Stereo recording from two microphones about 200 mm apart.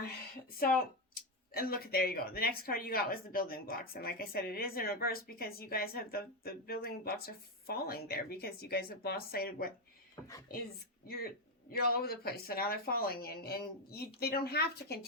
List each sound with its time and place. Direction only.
1.5 s speech: 50° left (ahead or behind)
11.7 s speech: 50° left (ahead or behind)